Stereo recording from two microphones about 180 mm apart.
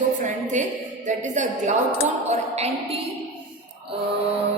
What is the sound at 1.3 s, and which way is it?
Speech, 40° right (ahead or behind).